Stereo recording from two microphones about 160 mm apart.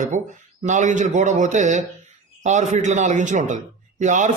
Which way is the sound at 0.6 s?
50° right (ahead or behind).